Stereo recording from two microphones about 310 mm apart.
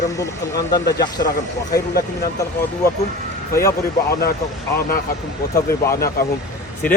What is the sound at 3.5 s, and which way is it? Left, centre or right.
Speech, centre.